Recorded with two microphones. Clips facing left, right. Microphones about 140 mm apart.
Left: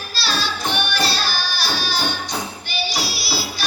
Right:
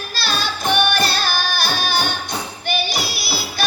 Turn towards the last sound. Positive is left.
turn(degrees=-55)  # may be behind; listen again after turning